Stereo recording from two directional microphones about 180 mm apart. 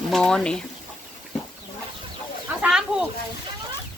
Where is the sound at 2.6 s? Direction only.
5° right (ahead or behind).